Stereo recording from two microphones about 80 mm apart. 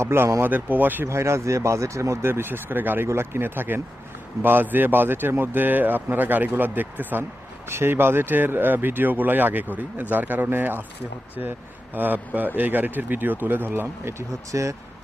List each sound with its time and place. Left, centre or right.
0.0 s speech: right
0.5 s speech: right
1.0 s speech: right
11.9 s speech: right